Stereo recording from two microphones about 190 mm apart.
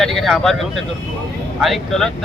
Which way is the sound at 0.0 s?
Centre (ahead or behind).